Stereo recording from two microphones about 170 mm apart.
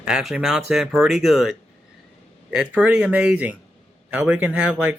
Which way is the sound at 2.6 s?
5° right (ahead or behind).